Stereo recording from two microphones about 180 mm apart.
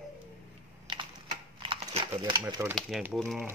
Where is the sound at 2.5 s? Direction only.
15° right (ahead or behind).